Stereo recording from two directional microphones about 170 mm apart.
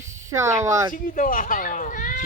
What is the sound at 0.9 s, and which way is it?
Speech, 50° left (ahead or behind).